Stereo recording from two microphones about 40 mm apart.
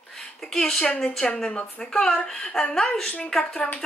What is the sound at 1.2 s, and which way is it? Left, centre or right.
Speech, left.